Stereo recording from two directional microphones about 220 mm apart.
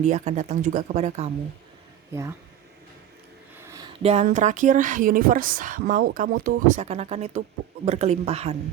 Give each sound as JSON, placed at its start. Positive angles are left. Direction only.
{"t": 0.0, "sound": "speech", "side_deg": -30}
{"t": 3.6, "sound": "a sound", "side_deg": -15}
{"t": 3.9, "sound": "speech", "side_deg": -30}